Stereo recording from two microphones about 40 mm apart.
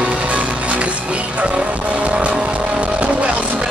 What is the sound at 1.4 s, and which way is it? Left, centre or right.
Vehicle, right.